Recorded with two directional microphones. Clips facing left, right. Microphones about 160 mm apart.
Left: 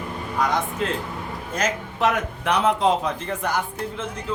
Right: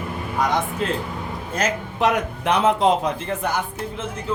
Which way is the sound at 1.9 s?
20° right (ahead or behind).